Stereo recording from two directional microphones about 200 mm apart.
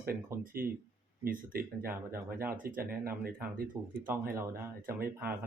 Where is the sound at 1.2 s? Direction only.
45° right (ahead or behind).